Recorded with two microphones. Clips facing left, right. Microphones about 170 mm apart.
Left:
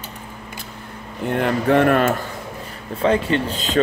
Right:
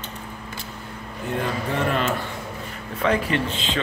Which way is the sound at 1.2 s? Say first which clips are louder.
Left 8 dB; 60° left (ahead or behind).